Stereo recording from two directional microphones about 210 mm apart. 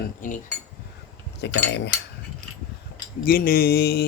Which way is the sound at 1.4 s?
55° left (ahead or behind).